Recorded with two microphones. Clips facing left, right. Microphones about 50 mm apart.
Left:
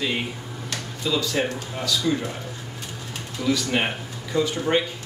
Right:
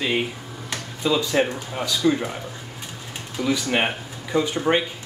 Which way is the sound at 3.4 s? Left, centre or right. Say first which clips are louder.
Right 1 dB; centre.